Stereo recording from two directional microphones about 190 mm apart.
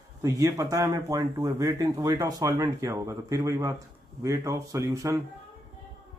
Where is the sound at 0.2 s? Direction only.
15° right (ahead or behind).